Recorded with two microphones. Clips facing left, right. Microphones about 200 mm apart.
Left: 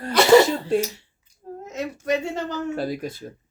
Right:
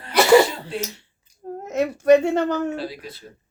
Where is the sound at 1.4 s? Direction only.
50° right (ahead or behind).